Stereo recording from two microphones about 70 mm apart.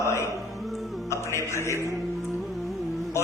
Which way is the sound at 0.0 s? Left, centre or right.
Left.